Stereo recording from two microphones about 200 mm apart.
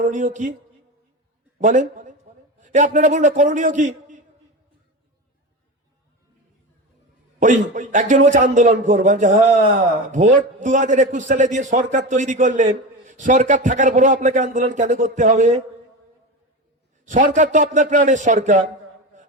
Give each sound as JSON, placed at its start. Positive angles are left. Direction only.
{"t": 0.0, "sound": "a man's voice", "side_deg": -40}
{"t": 1.5, "sound": "a man's voice", "side_deg": -40}
{"t": 7.3, "sound": "a man's voice", "side_deg": -40}
{"t": 17.1, "sound": "a man's voice", "side_deg": -40}
{"t": 19.1, "sound": "a sound", "side_deg": -40}